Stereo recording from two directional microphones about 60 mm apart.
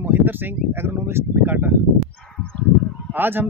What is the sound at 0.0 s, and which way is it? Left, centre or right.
Speech, right.